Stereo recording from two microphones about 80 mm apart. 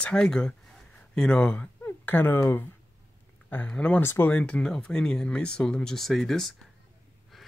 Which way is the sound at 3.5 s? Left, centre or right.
Centre.